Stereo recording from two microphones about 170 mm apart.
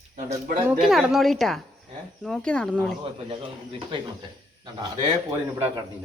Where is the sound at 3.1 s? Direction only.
30° right (ahead or behind).